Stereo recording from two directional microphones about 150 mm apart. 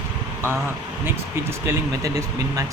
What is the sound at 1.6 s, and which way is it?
Speech, 20° right (ahead or behind).